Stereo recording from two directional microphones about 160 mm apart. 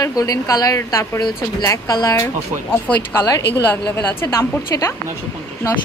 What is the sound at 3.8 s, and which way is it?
A woman's voice, 15° left (ahead or behind).